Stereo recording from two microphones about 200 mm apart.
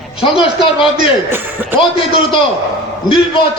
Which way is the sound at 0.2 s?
25° left (ahead or behind).